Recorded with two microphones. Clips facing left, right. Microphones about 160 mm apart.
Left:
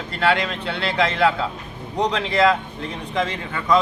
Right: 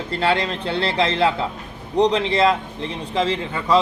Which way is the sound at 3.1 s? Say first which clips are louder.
Right 3 dB; 30° right (ahead or behind).